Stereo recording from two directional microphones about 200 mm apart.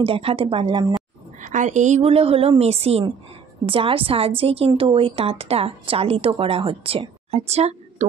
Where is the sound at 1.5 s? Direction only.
40° right (ahead or behind).